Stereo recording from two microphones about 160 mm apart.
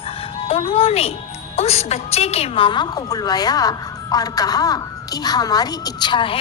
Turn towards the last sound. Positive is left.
turn(degrees=30)  # may be behind; listen again after turning